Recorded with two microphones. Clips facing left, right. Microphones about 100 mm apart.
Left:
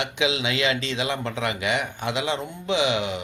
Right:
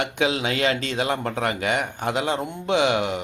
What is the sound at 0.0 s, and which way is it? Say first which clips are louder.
Speech: right 2 dB; 45° right (ahead or behind).